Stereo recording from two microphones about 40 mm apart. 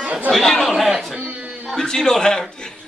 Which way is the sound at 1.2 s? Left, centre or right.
Right.